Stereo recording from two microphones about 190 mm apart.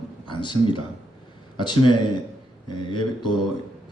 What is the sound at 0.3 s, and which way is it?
A man's voice, 25° left (ahead or behind).